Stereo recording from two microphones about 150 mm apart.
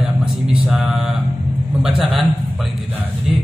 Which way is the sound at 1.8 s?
5° right (ahead or behind).